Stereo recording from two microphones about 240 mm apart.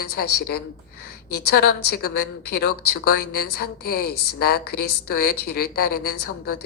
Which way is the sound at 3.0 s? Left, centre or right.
Left.